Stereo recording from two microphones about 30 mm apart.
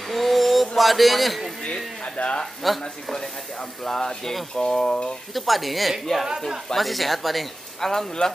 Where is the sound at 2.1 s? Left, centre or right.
Left.